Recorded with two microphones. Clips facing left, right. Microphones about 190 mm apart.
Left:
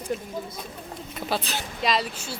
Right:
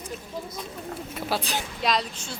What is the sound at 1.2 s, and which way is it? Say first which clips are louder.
Speech: even; 10° right (ahead or behind).